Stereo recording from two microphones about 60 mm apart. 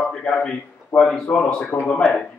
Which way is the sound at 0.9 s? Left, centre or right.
Left.